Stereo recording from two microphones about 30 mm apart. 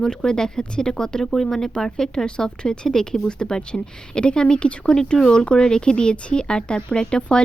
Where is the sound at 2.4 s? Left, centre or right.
Left.